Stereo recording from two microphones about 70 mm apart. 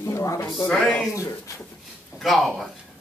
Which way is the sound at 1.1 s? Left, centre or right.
Left.